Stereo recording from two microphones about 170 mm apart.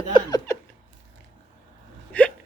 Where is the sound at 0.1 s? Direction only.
20° left (ahead or behind).